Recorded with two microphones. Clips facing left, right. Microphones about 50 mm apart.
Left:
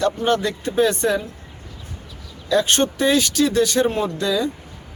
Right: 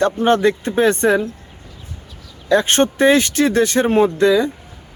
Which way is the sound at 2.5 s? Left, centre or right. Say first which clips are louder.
Right 4 dB; right.